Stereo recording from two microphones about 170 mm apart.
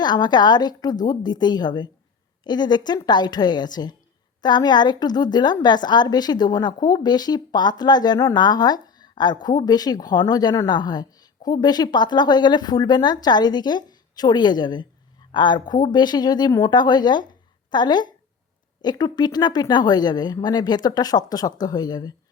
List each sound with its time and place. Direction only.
0.0 s a woman's voice: 25° left (ahead or behind)